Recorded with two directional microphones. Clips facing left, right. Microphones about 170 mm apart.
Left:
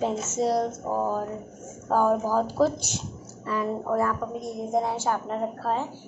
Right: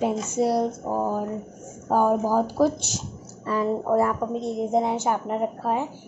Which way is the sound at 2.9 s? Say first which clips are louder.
Right 1 dB; 35° right (ahead or behind).